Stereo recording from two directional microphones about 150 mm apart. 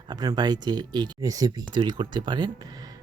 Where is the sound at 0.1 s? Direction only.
25° right (ahead or behind).